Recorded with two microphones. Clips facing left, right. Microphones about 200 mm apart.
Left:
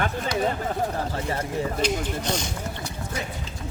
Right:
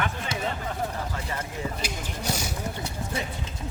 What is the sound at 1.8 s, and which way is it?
Speech, 10° right (ahead or behind).